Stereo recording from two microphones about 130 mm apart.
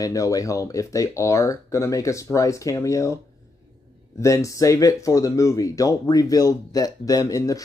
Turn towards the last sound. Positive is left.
turn(degrees=25)  # may be behind; listen again after turning